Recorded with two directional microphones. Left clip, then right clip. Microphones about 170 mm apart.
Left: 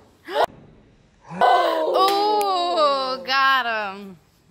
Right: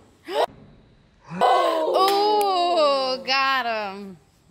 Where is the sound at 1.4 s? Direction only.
20° right (ahead or behind).